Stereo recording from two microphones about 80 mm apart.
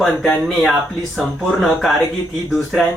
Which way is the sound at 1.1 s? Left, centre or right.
Centre.